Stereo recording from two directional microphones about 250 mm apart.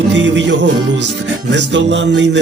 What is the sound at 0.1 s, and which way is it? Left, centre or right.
Music, right.